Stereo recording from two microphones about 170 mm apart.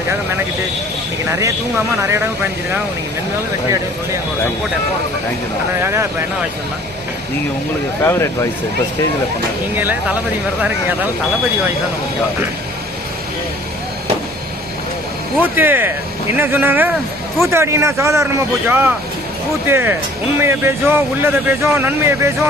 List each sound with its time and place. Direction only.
1.3 s speech: 20° right (ahead or behind)
5.8 s speech: 15° right (ahead or behind)
8.0 s speech: 15° left (ahead or behind)
9.7 s speech: 10° right (ahead or behind)
15.4 s speech: 10° right (ahead or behind)